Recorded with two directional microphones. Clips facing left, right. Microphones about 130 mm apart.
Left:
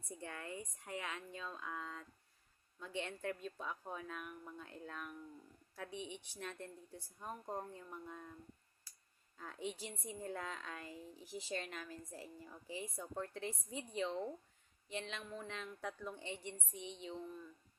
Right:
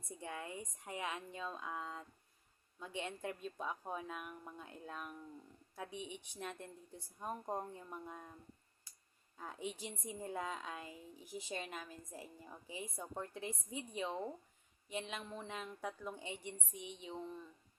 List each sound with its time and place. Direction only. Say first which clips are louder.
0.2 s a woman's voice: right 2 dB; 15° right (ahead or behind)
9.4 s a woman's voice: even; 15° right (ahead or behind)